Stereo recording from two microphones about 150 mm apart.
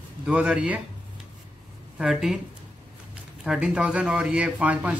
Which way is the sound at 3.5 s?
5° right (ahead or behind).